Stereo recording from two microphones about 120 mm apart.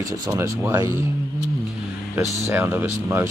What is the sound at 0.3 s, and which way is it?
Speech, 25° right (ahead or behind).